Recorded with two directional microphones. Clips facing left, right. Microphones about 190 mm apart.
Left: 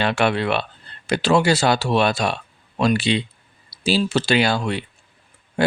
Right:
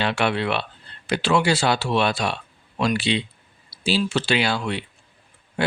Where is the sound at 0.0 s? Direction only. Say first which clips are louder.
Left 3 dB; 45° left (ahead or behind).